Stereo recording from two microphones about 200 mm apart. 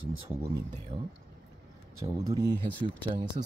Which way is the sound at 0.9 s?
25° right (ahead or behind).